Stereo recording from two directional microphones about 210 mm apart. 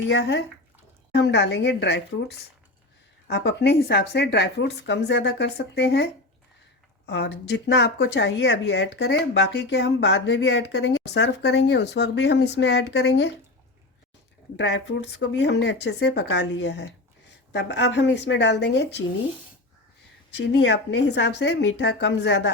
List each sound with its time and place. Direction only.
0.1 s a woman's voice: 55° left (ahead or behind)
14.5 s a woman's voice: 55° left (ahead or behind)
20.3 s a woman's voice: 55° left (ahead or behind)